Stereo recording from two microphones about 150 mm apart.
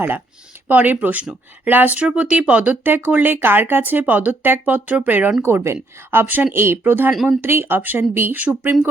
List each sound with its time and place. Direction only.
0.7 s speech: 10° right (ahead or behind)
7.1 s speech: 5° right (ahead or behind)
7.4 s speech: 15° right (ahead or behind)